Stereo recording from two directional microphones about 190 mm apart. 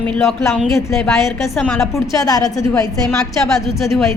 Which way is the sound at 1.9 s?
15° left (ahead or behind).